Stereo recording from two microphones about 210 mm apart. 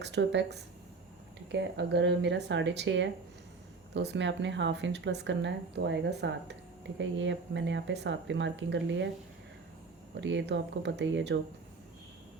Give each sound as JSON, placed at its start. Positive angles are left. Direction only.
{"t": 0.0, "sound": "speech", "side_deg": -55}
{"t": 10.2, "sound": "speech", "side_deg": -60}